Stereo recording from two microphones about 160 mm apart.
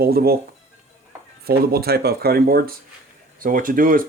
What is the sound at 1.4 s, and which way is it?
Speech, 75° right (ahead or behind).